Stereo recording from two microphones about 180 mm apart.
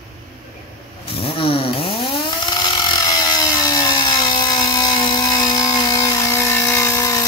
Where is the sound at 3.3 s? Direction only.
20° left (ahead or behind).